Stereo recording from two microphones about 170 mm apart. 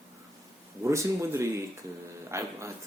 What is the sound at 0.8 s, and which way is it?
Speech, 15° right (ahead or behind).